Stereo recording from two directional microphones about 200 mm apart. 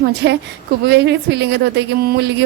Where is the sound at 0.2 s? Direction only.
60° right (ahead or behind).